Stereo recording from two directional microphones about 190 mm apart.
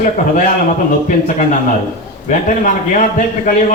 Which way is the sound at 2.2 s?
40° left (ahead or behind).